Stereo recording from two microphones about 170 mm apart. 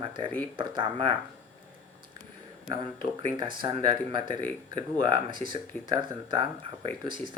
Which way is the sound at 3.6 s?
25° right (ahead or behind).